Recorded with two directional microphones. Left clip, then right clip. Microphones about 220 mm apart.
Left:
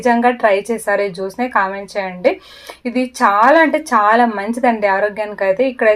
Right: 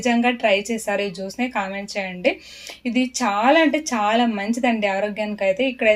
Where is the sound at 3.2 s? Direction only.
45° left (ahead or behind).